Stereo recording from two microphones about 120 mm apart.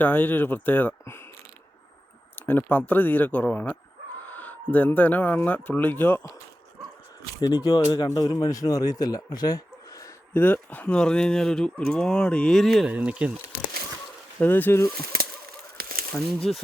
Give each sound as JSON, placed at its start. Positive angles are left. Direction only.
{"t": 0.0, "sound": "speech", "side_deg": 15}
{"t": 2.5, "sound": "speech", "side_deg": 15}
{"t": 7.4, "sound": "speech", "side_deg": 40}
{"t": 10.3, "sound": "speech", "side_deg": 15}
{"t": 12.9, "sound": "speech", "side_deg": -10}
{"t": 14.3, "sound": "speech", "side_deg": 15}
{"t": 16.1, "sound": "speech", "side_deg": 0}